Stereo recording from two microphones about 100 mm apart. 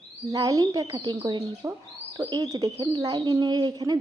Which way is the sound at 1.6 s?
35° right (ahead or behind).